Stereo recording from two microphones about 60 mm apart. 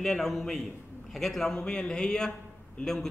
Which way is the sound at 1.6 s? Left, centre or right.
Centre.